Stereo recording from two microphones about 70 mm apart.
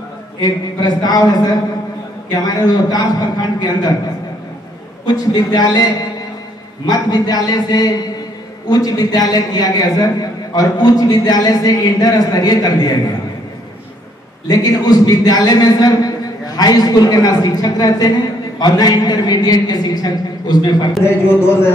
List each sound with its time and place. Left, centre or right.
0.4 s a man's voice: left
5.0 s a man's voice: left
14.5 s a man's voice: left
21.0 s speech: left